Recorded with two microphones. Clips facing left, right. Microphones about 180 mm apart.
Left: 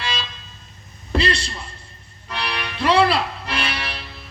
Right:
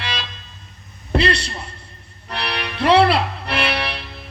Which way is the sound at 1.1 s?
65° right (ahead or behind).